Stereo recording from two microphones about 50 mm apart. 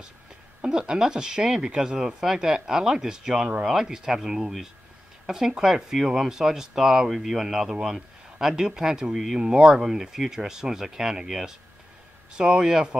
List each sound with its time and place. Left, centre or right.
0.7 s speech: centre